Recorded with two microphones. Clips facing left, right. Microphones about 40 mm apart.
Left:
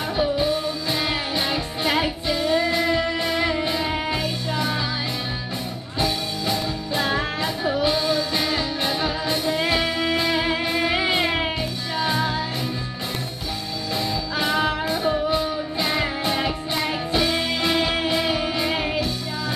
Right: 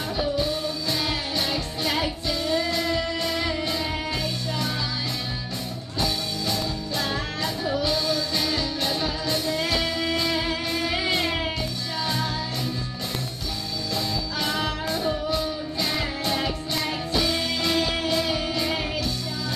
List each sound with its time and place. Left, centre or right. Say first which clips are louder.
0.2 s music: left 4 dB; centre
5.9 s music: left 3 dB; centre
13.9 s music: left 4 dB; left